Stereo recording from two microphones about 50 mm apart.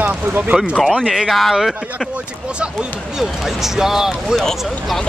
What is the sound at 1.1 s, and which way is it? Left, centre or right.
Speech, centre.